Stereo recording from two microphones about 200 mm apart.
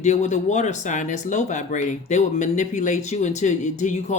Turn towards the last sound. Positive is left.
turn(degrees=35)  # may be behind; listen again after turning